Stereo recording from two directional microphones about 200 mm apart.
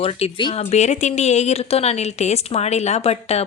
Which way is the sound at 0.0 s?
30° left (ahead or behind).